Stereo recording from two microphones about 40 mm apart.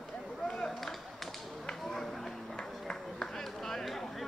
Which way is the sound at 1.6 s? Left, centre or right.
Centre.